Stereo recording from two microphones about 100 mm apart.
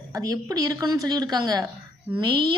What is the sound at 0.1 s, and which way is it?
A woman's voice, 35° right (ahead or behind).